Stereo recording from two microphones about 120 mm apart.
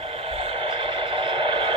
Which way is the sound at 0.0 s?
55° right (ahead or behind).